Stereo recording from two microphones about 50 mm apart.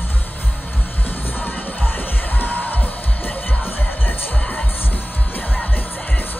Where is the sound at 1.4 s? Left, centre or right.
Left.